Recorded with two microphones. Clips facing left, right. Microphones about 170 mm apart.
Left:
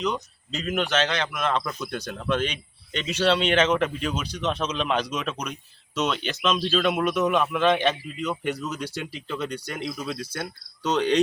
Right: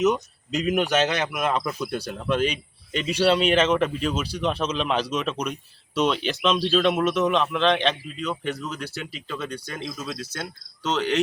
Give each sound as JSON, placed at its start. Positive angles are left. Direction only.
{"t": 0.0, "sound": "a man's voice", "side_deg": -20}